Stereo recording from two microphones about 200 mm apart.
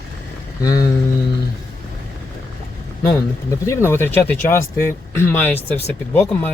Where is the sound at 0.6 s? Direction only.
15° left (ahead or behind).